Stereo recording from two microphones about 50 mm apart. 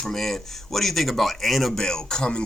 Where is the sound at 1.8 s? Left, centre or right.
Centre.